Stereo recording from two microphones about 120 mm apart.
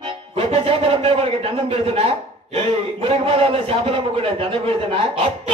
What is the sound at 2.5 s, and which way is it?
A man's voice, 55° right (ahead or behind).